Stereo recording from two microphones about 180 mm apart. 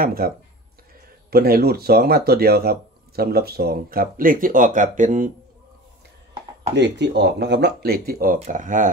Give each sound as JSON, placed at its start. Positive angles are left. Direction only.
{"t": 0.0, "sound": "speech", "side_deg": -55}
{"t": 1.3, "sound": "speech", "side_deg": -60}
{"t": 6.7, "sound": "speech", "side_deg": -75}